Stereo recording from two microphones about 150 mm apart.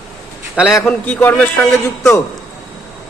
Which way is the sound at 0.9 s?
10° left (ahead or behind).